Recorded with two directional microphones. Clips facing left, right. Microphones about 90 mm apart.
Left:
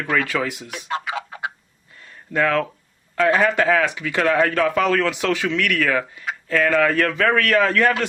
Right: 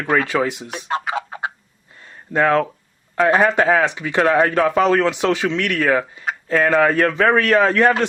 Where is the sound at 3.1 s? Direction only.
25° right (ahead or behind).